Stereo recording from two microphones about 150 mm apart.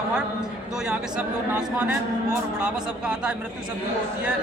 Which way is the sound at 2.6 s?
5° right (ahead or behind).